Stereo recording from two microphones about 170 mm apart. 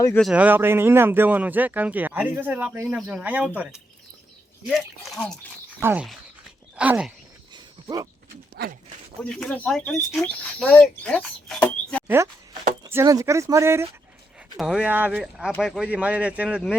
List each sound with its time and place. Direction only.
0.2 s speech: 5° right (ahead or behind)
5.8 s speech: 10° right (ahead or behind)
7.5 s wild animals: 25° right (ahead or behind)
8.6 s speech: 65° right (ahead or behind)
9.2 s speech: 5° left (ahead or behind)
12.0 s speech: 15° right (ahead or behind)
14.5 s speech: centre (ahead or behind)